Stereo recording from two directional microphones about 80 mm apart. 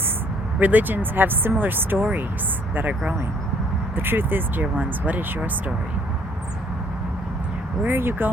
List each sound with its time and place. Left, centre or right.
0.6 s speech: right
3.9 s speech: right
7.9 s speech: right